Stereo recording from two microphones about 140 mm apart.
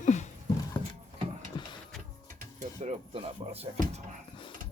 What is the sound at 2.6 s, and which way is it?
Speech, 55° right (ahead or behind).